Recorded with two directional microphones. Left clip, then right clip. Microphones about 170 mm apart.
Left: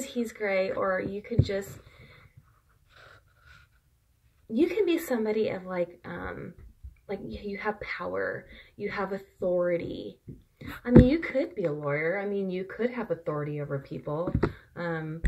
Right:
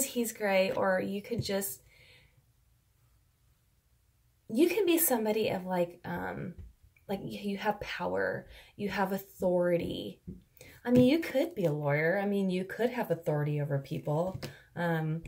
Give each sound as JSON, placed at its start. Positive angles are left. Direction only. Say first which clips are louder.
{"t": 0.0, "sound": "a woman's voice", "louder": "left 1 dB", "side_deg": -35}
{"t": 4.5, "sound": "speech", "louder": "left 1 dB", "side_deg": -30}
{"t": 11.1, "sound": "speech", "louder": "left 1 dB", "side_deg": -30}